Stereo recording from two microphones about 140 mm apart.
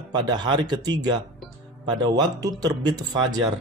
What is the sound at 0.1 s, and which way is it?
A man's voice, 30° right (ahead or behind).